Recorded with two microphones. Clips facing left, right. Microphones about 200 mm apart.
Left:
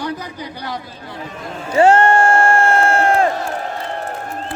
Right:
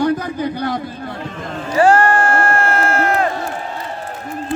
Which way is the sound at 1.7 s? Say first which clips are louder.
Left 1 dB; 25° left (ahead or behind).